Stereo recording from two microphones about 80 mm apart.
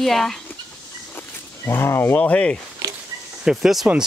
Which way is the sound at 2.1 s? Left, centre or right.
Centre.